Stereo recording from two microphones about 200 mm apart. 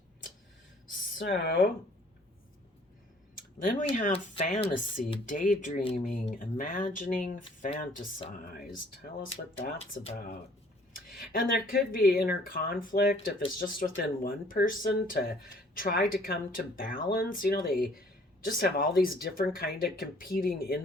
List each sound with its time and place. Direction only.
1.2 s speech: 60° left (ahead or behind)
3.6 s speech: 45° left (ahead or behind)
8.5 s speech: 55° left (ahead or behind)
9.7 s speech: 30° left (ahead or behind)
11.1 s speech: 45° left (ahead or behind)